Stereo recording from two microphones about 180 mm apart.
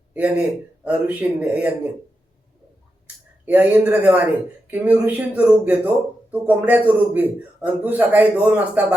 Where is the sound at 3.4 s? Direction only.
10° right (ahead or behind).